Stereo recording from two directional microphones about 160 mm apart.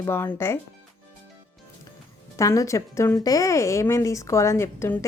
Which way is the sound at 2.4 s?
20° left (ahead or behind).